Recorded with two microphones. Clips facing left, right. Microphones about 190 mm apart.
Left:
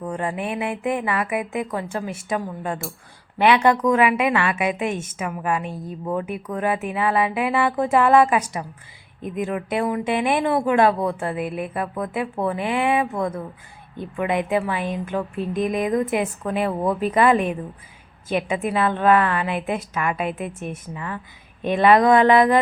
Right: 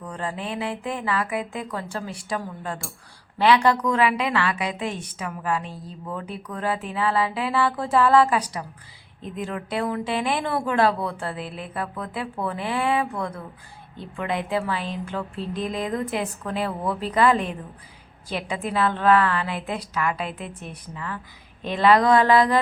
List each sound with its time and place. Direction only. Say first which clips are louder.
0.0 s mantra: left 5 dB; 20° left (ahead or behind)
0.5 s a woman's voice: left 5 dB; 20° left (ahead or behind)